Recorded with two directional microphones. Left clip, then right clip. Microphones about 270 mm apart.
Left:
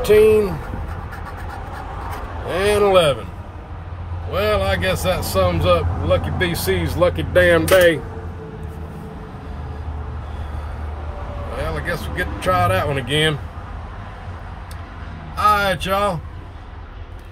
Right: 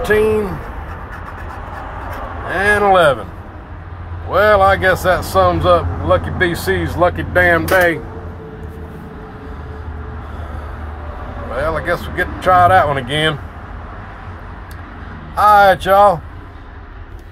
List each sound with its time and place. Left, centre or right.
0.0 s speech: left
2.7 s a sound: centre
4.3 s speech: centre
11.5 s speech: centre
15.3 s speech: centre